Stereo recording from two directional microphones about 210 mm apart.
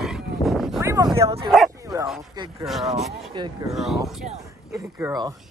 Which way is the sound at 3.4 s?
20° right (ahead or behind).